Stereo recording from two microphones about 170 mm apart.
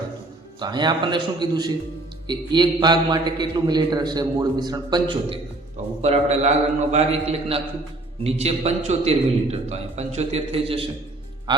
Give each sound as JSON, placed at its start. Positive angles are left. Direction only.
{"t": 0.6, "sound": "a man's voice", "side_deg": -25}
{"t": 6.0, "sound": "a man's voice", "side_deg": -40}